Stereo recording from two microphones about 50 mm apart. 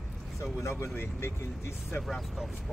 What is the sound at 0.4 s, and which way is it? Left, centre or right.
Speech, left.